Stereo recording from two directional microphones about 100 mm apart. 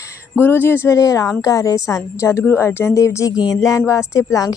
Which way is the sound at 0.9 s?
35° left (ahead or behind).